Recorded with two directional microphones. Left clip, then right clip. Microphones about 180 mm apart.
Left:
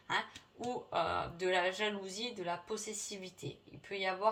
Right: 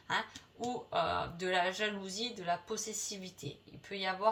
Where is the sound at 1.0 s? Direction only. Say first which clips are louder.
Right 1 dB; 35° left (ahead or behind).